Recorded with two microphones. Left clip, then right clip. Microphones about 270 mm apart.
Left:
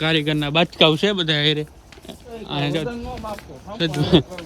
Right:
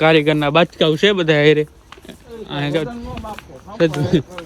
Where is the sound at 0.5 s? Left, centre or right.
Centre.